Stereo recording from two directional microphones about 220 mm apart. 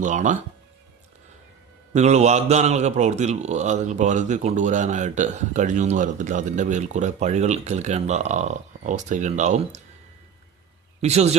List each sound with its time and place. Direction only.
0.0 s a man's voice: 35° right (ahead or behind)
1.9 s a man's voice: 30° right (ahead or behind)
11.0 s speech: 30° right (ahead or behind)